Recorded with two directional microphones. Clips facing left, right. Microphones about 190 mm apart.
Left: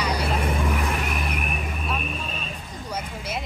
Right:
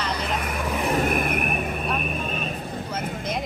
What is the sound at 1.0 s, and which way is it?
Vehicle, 55° right (ahead or behind).